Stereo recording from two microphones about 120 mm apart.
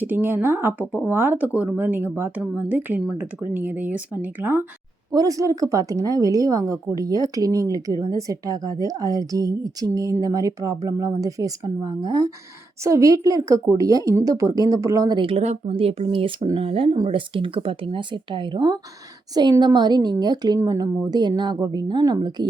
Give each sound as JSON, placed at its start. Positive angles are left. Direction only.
{"t": 0.0, "sound": "speech", "side_deg": -15}
{"t": 5.1, "sound": "a woman's voice", "side_deg": -30}
{"t": 15.2, "sound": "speech", "side_deg": -50}